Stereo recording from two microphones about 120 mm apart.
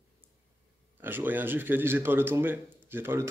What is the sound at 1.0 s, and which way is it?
A man's voice, 15° right (ahead or behind).